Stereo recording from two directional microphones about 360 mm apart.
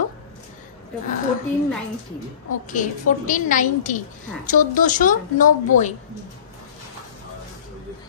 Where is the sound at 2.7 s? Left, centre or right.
Left.